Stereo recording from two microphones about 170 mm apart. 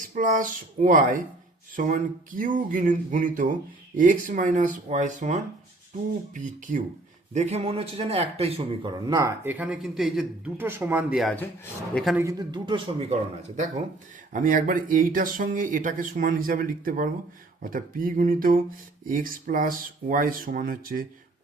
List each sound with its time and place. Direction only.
0.0 s speech: 50° right (ahead or behind)
7.3 s speech: 35° right (ahead or behind); by 10.5 s centre (ahead or behind)
10.6 s speech: 15° right (ahead or behind)
12.1 s speech: 20° right (ahead or behind); by 13.8 s 40° right (ahead or behind)
14.3 s speech: 50° right (ahead or behind)